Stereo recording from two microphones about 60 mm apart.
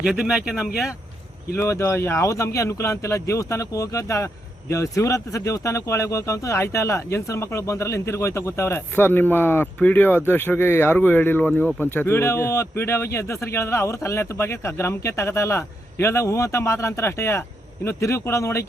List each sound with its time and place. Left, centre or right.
0.0 s speech: centre
1.5 s speech: left
8.9 s speech: left